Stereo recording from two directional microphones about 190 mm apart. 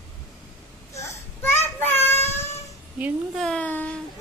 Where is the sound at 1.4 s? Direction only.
10° left (ahead or behind).